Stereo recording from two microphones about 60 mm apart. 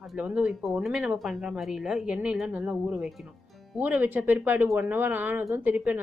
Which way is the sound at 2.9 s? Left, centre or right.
Centre.